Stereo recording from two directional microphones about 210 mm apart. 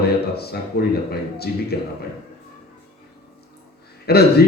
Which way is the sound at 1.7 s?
50° left (ahead or behind).